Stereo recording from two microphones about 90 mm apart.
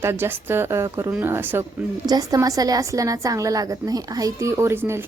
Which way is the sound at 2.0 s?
45° right (ahead or behind).